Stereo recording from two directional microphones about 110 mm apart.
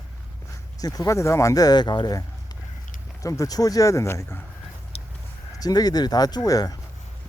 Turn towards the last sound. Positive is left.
turn(degrees=35)  # may be behind; listen again after turning